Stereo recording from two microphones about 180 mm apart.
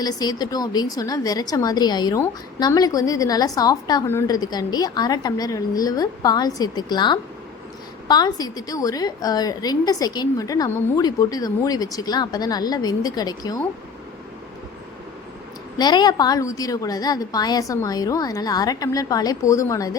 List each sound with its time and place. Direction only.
0.0 s a woman's voice: 20° left (ahead or behind)
15.8 s a woman's voice: 25° left (ahead or behind)